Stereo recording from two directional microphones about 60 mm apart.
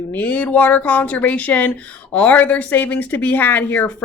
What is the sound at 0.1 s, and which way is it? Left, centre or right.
Speech, left.